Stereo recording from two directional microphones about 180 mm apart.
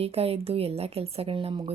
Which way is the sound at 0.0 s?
35° right (ahead or behind).